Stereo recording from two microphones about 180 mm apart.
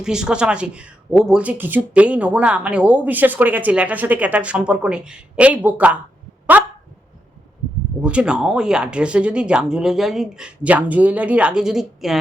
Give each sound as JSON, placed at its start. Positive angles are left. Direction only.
{"t": 0.0, "sound": "speech", "side_deg": -5}
{"t": 6.5, "sound": "dog", "side_deg": -10}
{"t": 8.0, "sound": "speech", "side_deg": -5}